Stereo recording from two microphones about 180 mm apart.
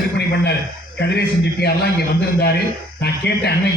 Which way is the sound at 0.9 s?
65° left (ahead or behind).